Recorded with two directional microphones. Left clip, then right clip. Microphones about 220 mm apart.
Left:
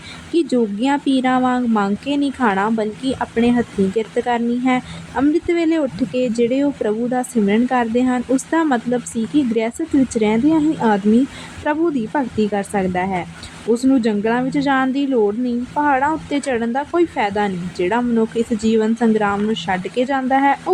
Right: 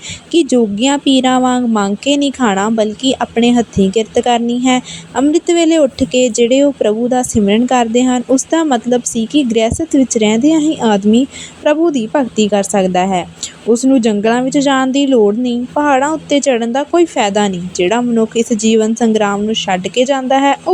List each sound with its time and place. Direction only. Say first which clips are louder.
0.3 s a woman's voice: right 6 dB; 30° right (ahead or behind)